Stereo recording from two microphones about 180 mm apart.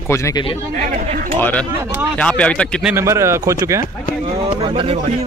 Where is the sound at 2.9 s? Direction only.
15° right (ahead or behind).